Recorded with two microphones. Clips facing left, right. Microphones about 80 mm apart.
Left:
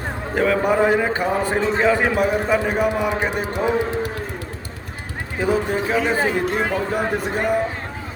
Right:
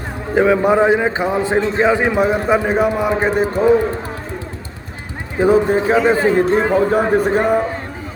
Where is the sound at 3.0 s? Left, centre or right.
Right.